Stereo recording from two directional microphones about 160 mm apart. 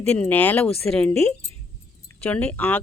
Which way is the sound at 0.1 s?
10° left (ahead or behind).